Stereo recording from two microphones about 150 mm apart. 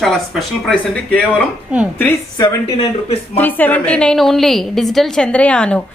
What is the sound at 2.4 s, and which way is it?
Speech, 40° left (ahead or behind).